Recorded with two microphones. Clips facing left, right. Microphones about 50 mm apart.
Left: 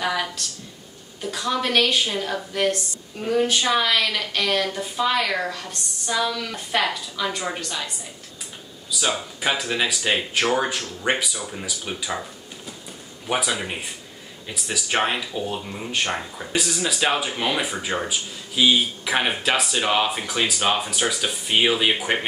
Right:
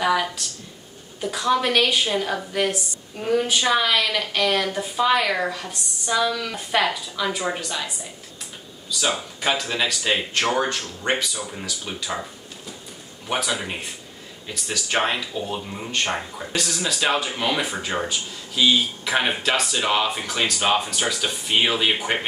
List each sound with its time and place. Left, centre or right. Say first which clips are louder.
0.0 s speech: right 4 dB; centre
9.0 s speech: even; centre
13.3 s speech: left 1 dB; centre